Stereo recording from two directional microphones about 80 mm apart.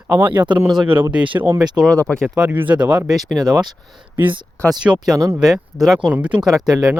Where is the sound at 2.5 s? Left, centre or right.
Right.